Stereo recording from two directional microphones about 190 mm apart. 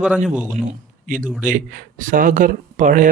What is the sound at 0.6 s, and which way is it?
A man's voice, 45° right (ahead or behind).